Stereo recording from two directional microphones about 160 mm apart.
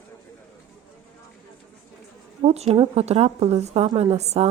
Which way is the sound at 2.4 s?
40° right (ahead or behind).